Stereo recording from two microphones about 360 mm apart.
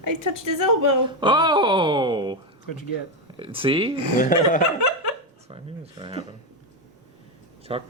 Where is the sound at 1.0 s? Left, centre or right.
Centre.